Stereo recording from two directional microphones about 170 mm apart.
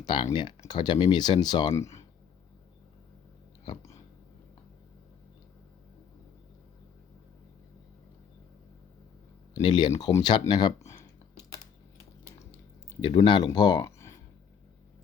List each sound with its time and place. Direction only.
0.0 s speech: 25° left (ahead or behind)
3.6 s a sound: 25° left (ahead or behind)
9.6 s speech: 25° left (ahead or behind)
13.0 s speech: 25° left (ahead or behind)